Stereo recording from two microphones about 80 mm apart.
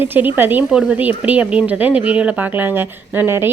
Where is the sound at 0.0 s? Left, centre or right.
Right.